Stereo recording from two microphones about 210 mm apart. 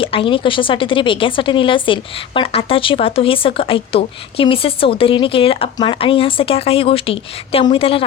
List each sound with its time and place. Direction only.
0.0 s speech: 25° left (ahead or behind)